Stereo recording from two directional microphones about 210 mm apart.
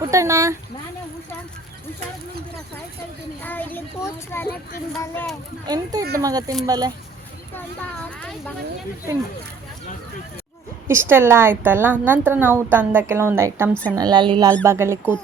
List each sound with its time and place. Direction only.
0.1 s a woman's voice: 15° right (ahead or behind)
3.4 s a child's voice: 10° left (ahead or behind)
5.6 s a woman's voice: 20° right (ahead or behind)
7.5 s a child's voice: 5° left (ahead or behind)
10.8 s a woman's voice: 10° right (ahead or behind)